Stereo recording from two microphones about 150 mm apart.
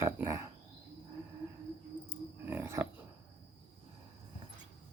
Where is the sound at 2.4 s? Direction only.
15° right (ahead or behind).